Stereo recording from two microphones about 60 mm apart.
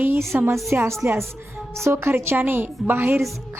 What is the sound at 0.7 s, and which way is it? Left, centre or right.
A woman's voice, right.